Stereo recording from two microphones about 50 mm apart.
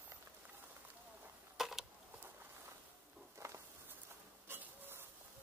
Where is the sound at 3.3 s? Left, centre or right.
Right.